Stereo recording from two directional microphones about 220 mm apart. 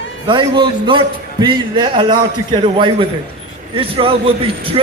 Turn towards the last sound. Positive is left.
turn(degrees=-25)  # may be behind; listen again after turning